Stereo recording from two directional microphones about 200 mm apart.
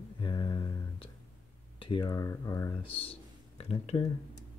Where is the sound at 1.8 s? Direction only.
25° left (ahead or behind).